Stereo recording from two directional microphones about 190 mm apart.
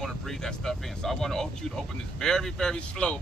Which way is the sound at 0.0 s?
5° left (ahead or behind).